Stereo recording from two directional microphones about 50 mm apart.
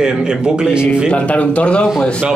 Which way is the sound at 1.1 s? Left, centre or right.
Left.